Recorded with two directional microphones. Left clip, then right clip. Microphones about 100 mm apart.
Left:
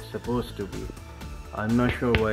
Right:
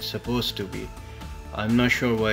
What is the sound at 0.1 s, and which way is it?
Speech, 35° right (ahead or behind).